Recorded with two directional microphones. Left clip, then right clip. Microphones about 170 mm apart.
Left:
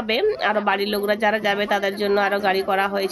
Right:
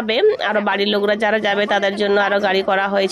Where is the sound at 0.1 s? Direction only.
30° right (ahead or behind).